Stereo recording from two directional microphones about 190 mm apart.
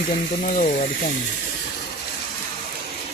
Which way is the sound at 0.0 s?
50° left (ahead or behind).